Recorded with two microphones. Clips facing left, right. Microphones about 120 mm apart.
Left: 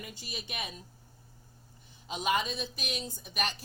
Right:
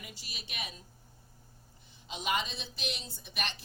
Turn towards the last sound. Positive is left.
turn(degrees=45)  # may be behind; listen again after turning